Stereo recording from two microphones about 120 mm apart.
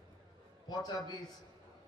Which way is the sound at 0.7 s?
30° left (ahead or behind).